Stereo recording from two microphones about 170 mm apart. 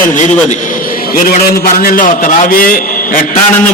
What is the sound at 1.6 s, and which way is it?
A man's voice, 60° left (ahead or behind).